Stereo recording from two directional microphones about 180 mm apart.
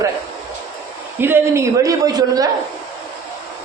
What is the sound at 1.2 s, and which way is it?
A man's voice, 15° right (ahead or behind).